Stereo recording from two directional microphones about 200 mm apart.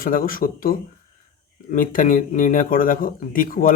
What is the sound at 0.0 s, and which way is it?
Speech, 45° left (ahead or behind).